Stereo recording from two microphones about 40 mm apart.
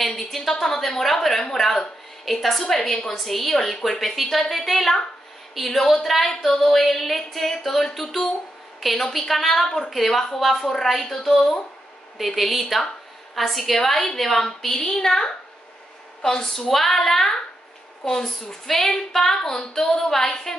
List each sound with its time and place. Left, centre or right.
0.0 s a woman's voice: centre
2.6 s a woman's voice: centre
14.7 s speech: centre